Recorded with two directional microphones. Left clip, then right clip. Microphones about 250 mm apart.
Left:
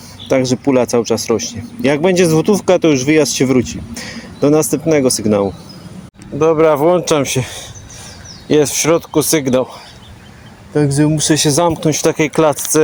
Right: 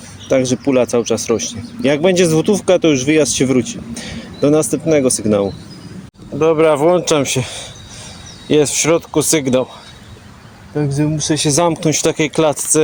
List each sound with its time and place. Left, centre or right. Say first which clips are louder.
0.3 s speech: left 1 dB; centre
10.8 s speech: left 4 dB; centre
11.4 s speech: right 2 dB; centre